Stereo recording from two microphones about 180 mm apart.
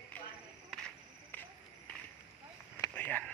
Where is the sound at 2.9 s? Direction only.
10° left (ahead or behind).